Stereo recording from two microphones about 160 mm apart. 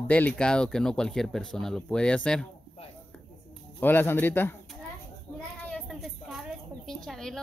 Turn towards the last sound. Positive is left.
turn(degrees=5)  # may be behind; listen again after turning